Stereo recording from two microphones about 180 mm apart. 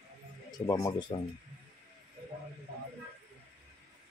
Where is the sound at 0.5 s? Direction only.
20° left (ahead or behind).